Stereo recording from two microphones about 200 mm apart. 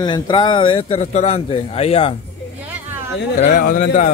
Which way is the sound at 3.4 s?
40° left (ahead or behind).